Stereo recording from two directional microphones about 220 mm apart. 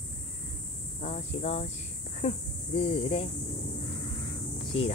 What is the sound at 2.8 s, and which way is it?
Speech, 25° left (ahead or behind).